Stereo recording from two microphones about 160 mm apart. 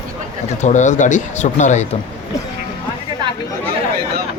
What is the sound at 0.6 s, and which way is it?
A man's voice, 50° left (ahead or behind).